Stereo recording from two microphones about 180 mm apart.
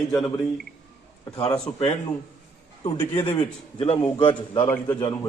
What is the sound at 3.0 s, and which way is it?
Speech, 10° left (ahead or behind).